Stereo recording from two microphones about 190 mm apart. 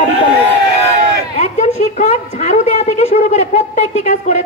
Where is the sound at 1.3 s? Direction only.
35° left (ahead or behind).